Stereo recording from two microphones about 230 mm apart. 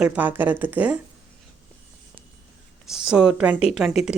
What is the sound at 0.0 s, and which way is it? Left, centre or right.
Speech, centre.